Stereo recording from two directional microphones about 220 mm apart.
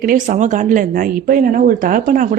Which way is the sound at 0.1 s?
35° right (ahead or behind).